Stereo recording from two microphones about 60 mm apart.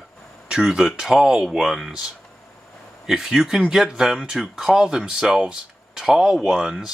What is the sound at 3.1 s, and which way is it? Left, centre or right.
Speech, centre.